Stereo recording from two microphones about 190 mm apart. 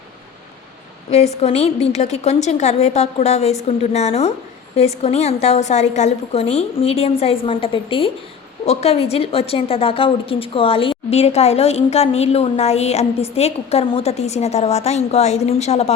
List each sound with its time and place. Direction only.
1.1 s a woman's voice: 35° left (ahead or behind)